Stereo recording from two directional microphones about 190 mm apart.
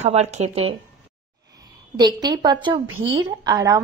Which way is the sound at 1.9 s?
20° right (ahead or behind).